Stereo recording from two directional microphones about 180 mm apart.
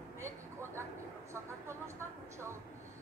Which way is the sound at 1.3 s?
15° right (ahead or behind).